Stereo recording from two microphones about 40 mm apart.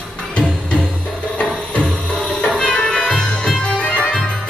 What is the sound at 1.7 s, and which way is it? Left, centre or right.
Music, left.